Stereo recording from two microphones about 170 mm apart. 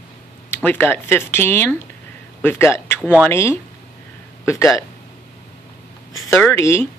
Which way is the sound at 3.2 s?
15° left (ahead or behind).